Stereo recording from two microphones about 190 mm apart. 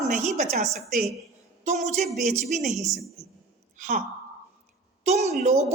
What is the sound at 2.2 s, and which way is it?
A woman's voice, 40° right (ahead or behind).